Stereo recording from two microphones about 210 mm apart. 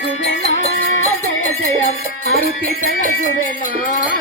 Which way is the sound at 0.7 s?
45° right (ahead or behind).